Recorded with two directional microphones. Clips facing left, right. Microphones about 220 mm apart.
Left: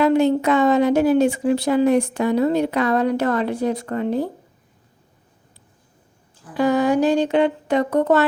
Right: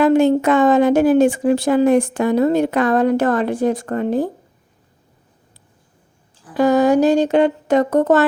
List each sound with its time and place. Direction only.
0.0 s a woman's voice: 45° right (ahead or behind)
6.6 s a woman's voice: 45° right (ahead or behind)